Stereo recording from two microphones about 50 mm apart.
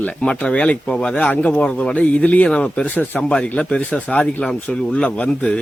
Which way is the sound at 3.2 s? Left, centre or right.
Left.